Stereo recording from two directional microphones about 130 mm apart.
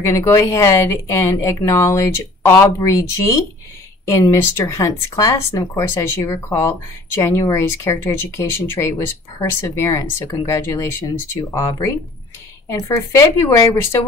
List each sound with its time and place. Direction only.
0.0 s speech: 20° left (ahead or behind)